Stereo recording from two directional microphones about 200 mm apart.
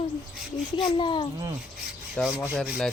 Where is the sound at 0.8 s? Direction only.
25° left (ahead or behind).